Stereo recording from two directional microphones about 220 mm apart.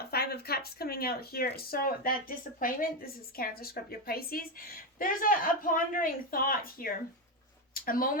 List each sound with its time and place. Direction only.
0.0 s speech: 45° left (ahead or behind)